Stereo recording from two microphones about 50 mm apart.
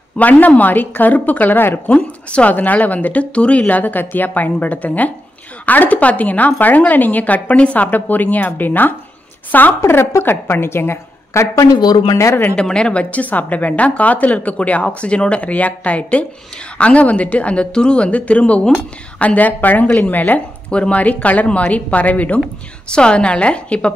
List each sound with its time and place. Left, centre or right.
0.2 s a woman's voice: left
1.9 s speech: left
2.5 s a woman's voice: left
9.8 s a woman's voice: left
12.5 s a woman's voice: centre
13.1 s a woman's voice: left
20.7 s a woman's voice: left
22.8 s a woman's voice: centre